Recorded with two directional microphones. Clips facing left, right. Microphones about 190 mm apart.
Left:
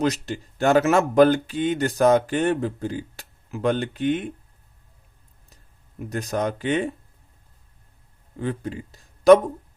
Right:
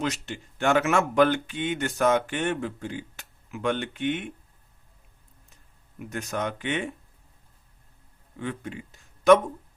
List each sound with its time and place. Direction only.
0.0 s speech: 40° left (ahead or behind)
6.0 s speech: 35° left (ahead or behind)
8.4 s speech: 35° left (ahead or behind)